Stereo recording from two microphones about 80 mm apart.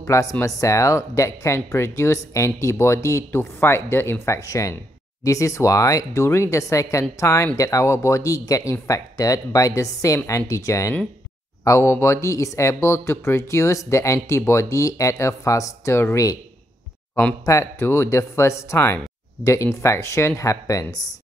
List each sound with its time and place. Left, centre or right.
0.0 s speech: left
4.4 s a woman's voice: left
17.5 s speech: left